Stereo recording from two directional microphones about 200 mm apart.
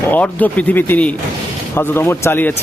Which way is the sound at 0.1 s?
10° left (ahead or behind).